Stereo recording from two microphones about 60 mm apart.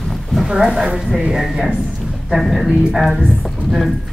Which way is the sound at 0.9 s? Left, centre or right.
Centre.